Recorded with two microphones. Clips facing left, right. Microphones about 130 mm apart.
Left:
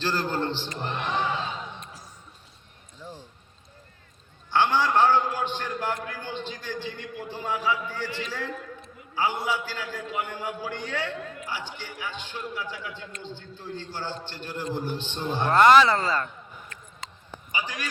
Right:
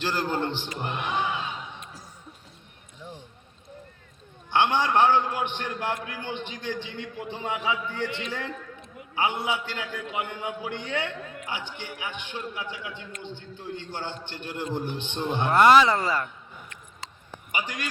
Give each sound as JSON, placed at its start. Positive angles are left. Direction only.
{"t": 0.0, "sound": "a man's voice", "side_deg": -15}
{"t": 3.0, "sound": "a sound", "side_deg": -20}
{"t": 4.5, "sound": "a man's voice", "side_deg": -20}